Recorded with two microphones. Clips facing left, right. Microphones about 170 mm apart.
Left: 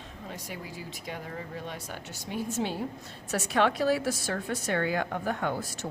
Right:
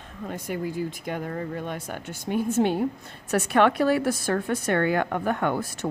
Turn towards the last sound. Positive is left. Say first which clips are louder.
# right 6 dB
turn(degrees=-60)  # may be behind; listen again after turning